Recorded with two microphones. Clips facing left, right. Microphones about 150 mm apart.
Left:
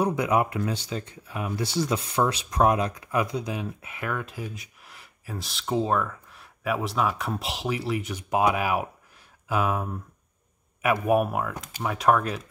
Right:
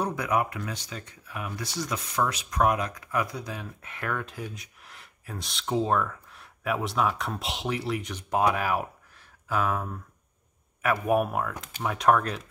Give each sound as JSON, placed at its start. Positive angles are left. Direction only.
{"t": 0.1, "sound": "speech", "side_deg": 25}
{"t": 3.8, "sound": "speech", "side_deg": 5}
{"t": 11.1, "sound": "speech", "side_deg": 5}